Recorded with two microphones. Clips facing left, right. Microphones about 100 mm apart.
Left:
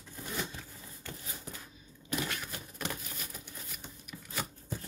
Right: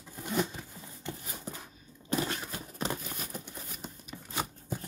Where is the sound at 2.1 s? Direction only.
30° right (ahead or behind).